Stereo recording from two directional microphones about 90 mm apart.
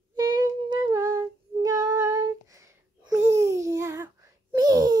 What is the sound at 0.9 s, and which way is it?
Female singing, 30° right (ahead or behind).